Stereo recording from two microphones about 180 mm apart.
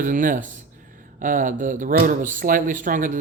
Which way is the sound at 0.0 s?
45° right (ahead or behind).